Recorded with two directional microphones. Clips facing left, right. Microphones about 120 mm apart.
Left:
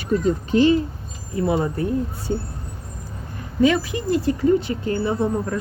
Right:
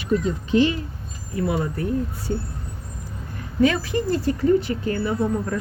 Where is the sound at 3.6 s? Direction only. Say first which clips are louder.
Left 1 dB; 20° left (ahead or behind).